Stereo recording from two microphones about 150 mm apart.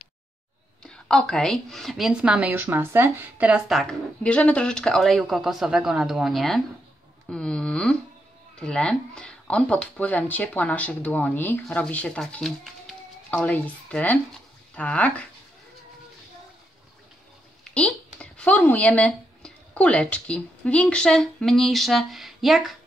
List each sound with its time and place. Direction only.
0.8 s a woman's voice: 5° left (ahead or behind)
17.6 s speech: 5° left (ahead or behind)